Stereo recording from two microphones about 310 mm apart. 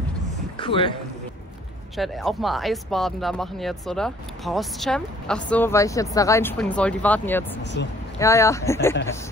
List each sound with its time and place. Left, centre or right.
0.6 s speech: centre
2.0 s speech: centre
7.6 s speech: left
8.2 s speech: centre